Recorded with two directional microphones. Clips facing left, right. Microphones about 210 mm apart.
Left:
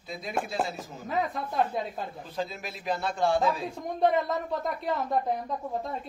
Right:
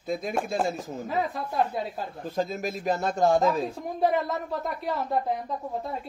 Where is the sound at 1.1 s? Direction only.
Centre (ahead or behind).